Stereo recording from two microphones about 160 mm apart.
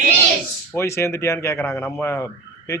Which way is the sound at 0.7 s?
15° left (ahead or behind).